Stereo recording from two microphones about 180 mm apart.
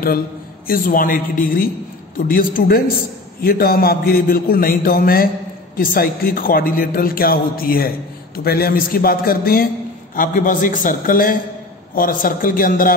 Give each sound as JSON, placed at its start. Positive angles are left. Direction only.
{"t": 0.7, "sound": "a man's voice", "side_deg": 50}